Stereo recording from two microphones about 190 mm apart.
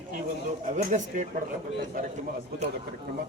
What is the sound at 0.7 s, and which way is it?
Speech, 40° right (ahead or behind).